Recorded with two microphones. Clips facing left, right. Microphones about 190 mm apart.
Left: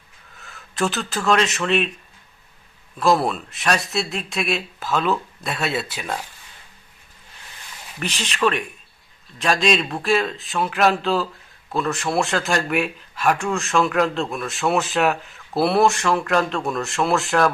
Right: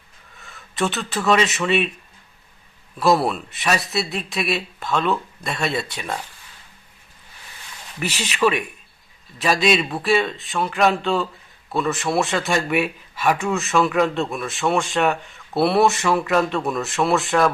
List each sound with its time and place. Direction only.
0.3 s speech: centre (ahead or behind)
3.0 s speech: centre (ahead or behind)
7.9 s speech: 5° right (ahead or behind)